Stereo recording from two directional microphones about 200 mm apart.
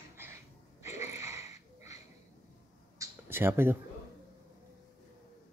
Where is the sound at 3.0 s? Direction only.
10° right (ahead or behind).